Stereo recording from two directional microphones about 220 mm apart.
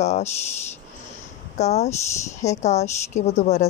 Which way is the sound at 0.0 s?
30° left (ahead or behind).